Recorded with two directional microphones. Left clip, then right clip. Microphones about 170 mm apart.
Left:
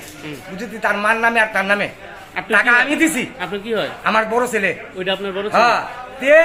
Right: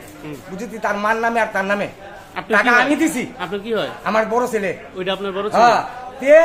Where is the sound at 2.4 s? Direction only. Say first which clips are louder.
Left 2 dB; 5° right (ahead or behind).